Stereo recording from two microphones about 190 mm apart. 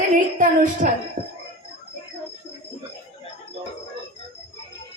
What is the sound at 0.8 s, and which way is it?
Speech, 45° right (ahead or behind).